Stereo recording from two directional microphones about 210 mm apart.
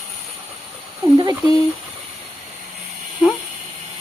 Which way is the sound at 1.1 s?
20° right (ahead or behind).